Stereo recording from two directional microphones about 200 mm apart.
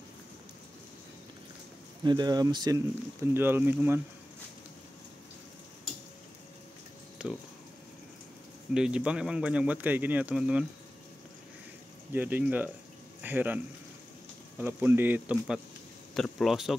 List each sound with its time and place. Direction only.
2.0 s speech: 20° right (ahead or behind)
7.2 s speech: 5° right (ahead or behind)
8.7 s speech: 5° right (ahead or behind)
12.1 s speech: 10° right (ahead or behind)
14.6 s speech: 10° right (ahead or behind)